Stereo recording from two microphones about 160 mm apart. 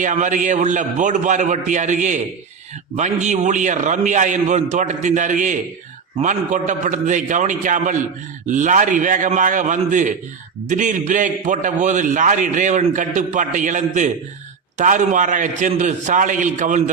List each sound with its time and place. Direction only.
0.0 s a man's voice: 50° right (ahead or behind)